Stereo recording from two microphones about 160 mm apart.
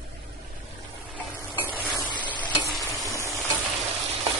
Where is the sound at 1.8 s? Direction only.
10° left (ahead or behind).